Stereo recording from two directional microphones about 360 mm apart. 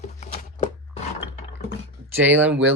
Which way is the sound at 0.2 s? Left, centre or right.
Centre.